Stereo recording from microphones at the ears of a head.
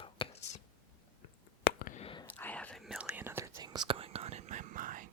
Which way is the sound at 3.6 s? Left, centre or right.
Right.